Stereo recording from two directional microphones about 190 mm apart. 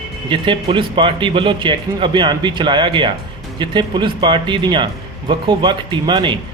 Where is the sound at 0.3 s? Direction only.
25° right (ahead or behind).